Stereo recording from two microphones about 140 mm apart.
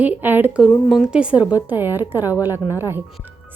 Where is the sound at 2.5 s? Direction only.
20° left (ahead or behind).